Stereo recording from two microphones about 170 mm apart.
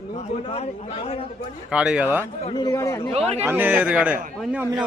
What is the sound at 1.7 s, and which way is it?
Speech, 5° right (ahead or behind).